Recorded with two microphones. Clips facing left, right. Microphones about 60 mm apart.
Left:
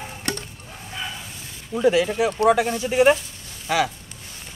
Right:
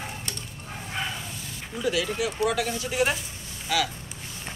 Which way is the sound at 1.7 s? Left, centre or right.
Left.